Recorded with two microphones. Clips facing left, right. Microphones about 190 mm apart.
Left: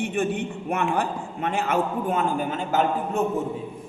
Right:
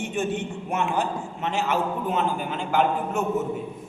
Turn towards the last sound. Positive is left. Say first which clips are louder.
# even
turn(degrees=40)  # may be behind; listen again after turning